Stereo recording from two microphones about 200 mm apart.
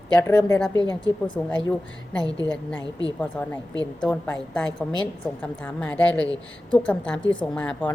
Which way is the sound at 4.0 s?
5° left (ahead or behind).